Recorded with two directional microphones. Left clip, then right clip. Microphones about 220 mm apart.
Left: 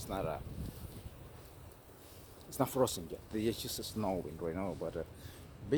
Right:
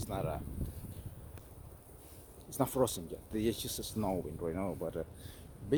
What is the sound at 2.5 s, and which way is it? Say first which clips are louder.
Speech: even; 10° right (ahead or behind).